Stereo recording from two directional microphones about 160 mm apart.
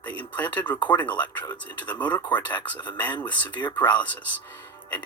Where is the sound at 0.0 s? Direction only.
10° left (ahead or behind).